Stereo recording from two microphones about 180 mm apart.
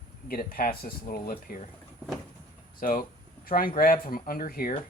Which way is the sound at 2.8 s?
50° left (ahead or behind).